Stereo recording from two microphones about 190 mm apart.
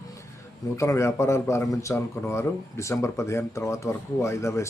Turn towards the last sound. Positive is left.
turn(degrees=15)  # may be behind; listen again after turning